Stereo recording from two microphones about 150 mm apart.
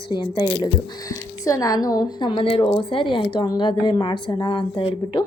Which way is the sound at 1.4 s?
25° left (ahead or behind).